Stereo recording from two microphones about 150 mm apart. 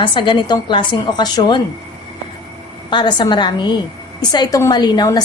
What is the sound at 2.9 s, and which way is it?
A woman's voice, 30° left (ahead or behind).